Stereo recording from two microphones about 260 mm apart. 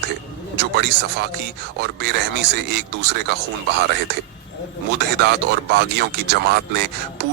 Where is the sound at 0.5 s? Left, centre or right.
Right.